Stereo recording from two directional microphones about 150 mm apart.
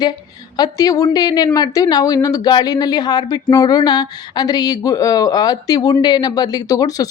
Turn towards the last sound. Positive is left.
turn(degrees=25)  # may be behind; listen again after turning